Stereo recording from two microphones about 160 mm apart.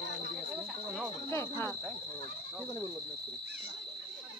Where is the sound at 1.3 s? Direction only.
15° left (ahead or behind).